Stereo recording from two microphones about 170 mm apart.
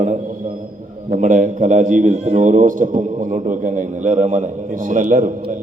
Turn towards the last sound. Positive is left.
turn(degrees=-50)  # may be behind; listen again after turning